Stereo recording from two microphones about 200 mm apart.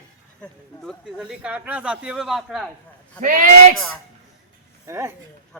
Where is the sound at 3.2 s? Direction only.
40° right (ahead or behind).